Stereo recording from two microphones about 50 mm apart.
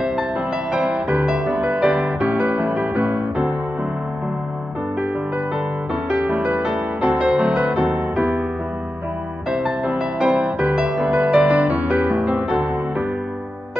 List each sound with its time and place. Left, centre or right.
0.7 s music: right
6.0 s music: right
9.5 s music: centre
10.3 s music: right